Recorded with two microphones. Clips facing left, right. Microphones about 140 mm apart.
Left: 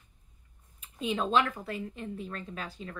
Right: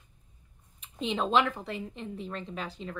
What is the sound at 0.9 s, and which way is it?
A woman's voice, 25° right (ahead or behind).